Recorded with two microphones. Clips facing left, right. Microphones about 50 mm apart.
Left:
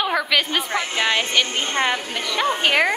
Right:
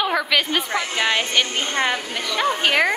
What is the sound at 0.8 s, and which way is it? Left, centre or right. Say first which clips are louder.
Speech: left 1 dB; left.